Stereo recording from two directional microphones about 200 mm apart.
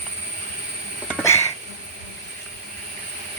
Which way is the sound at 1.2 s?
15° left (ahead or behind).